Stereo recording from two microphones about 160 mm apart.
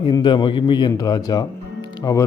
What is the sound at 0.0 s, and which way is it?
A man's voice, 30° left (ahead or behind).